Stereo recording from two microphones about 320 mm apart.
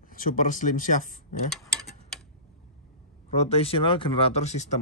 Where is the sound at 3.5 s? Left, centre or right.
Centre.